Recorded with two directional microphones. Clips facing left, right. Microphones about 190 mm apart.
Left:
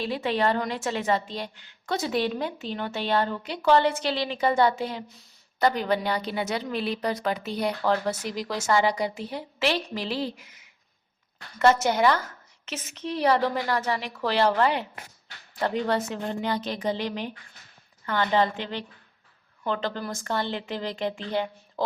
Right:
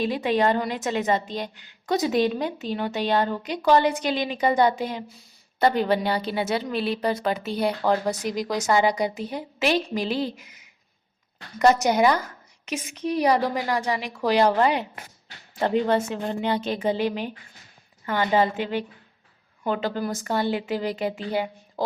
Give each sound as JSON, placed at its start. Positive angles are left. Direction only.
{"t": 0.0, "sound": "a woman's voice", "side_deg": -15}
{"t": 5.5, "sound": "a woman's voice", "side_deg": -25}
{"t": 11.6, "sound": "a woman's voice", "side_deg": -15}
{"t": 16.8, "sound": "a woman's voice", "side_deg": -15}